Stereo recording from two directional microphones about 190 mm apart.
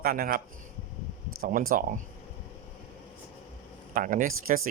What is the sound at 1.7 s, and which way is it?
Speech, 45° right (ahead or behind).